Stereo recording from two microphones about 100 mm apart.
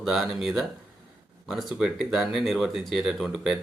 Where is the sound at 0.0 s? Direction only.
5° right (ahead or behind).